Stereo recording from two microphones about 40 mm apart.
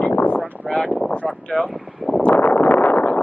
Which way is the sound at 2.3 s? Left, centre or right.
Left.